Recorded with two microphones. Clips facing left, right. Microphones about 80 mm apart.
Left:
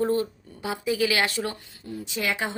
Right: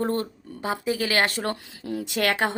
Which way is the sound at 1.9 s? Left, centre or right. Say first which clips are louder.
Right 4 dB; right.